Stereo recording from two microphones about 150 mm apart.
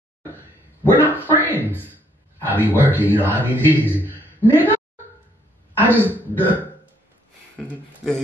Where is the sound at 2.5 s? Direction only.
10° left (ahead or behind).